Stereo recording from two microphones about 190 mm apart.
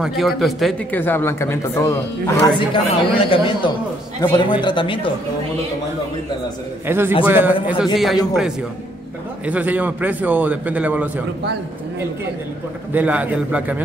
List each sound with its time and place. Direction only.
0.4 s speech: centre (ahead or behind)
2.7 s speech: 25° left (ahead or behind)
6.9 s a man's voice: 10° right (ahead or behind)
12.9 s a man's voice: 5° right (ahead or behind)